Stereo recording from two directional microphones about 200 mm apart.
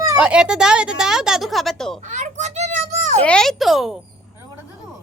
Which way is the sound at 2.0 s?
35° right (ahead or behind).